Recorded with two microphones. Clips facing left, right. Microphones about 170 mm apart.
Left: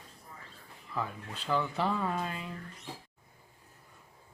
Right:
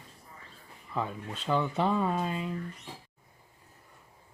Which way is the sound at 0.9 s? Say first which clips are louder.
Right 3 dB; 25° right (ahead or behind).